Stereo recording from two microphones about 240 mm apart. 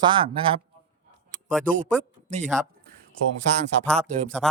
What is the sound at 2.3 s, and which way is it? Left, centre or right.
Speech, right.